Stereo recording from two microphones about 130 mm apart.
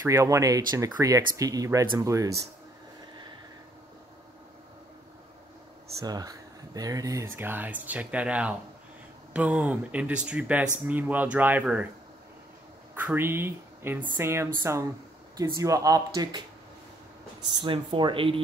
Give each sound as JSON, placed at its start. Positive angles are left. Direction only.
{"t": 0.0, "sound": "speech", "side_deg": -20}
{"t": 5.9, "sound": "speech", "side_deg": -30}
{"t": 7.3, "sound": "speech", "side_deg": -15}
{"t": 12.9, "sound": "speech", "side_deg": -15}
{"t": 17.6, "sound": "speech", "side_deg": -40}